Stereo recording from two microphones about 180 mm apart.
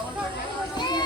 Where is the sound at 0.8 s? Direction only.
25° left (ahead or behind).